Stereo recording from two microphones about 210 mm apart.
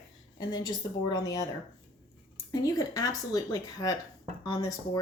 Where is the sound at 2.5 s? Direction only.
15° left (ahead or behind).